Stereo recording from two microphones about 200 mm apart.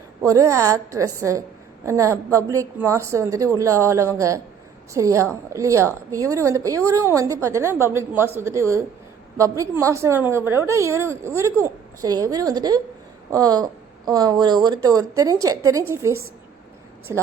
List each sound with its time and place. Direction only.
0.2 s a woman's voice: 15° right (ahead or behind)